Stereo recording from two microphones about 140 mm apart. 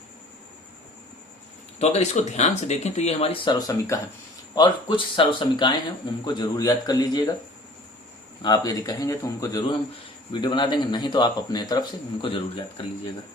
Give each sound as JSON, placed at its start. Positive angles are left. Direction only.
{"t": 1.8, "sound": "speech", "side_deg": 50}
{"t": 3.7, "sound": "a man's voice", "side_deg": 20}
{"t": 4.5, "sound": "a man's voice", "side_deg": 35}
{"t": 8.4, "sound": "a man's voice", "side_deg": 30}